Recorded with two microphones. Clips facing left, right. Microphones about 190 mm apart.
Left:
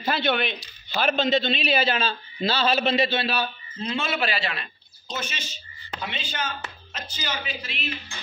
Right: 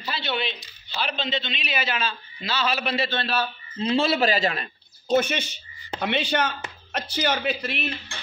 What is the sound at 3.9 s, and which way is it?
Speech, 35° right (ahead or behind).